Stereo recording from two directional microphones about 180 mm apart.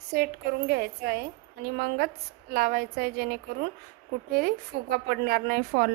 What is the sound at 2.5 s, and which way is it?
A woman's voice, 55° right (ahead or behind).